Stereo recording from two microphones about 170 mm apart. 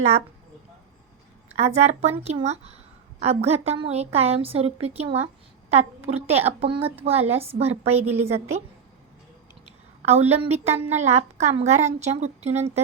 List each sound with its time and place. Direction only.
1.5 s a woman's voice: 40° right (ahead or behind)
10.1 s a woman's voice: 40° right (ahead or behind)
10.7 s a woman's voice: 10° right (ahead or behind)
10.9 s a woman's voice: 40° right (ahead or behind)